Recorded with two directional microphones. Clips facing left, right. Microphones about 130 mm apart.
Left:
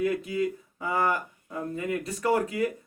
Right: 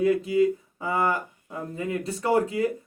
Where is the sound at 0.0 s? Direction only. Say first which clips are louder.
Right 6 dB; 30° right (ahead or behind).